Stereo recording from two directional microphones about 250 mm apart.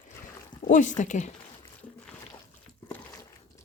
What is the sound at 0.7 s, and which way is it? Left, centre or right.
Speech, left.